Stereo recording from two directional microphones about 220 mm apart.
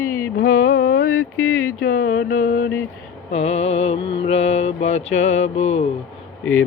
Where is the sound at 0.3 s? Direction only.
40° left (ahead or behind).